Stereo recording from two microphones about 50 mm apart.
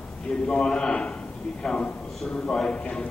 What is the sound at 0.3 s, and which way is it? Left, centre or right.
A man's voice, centre.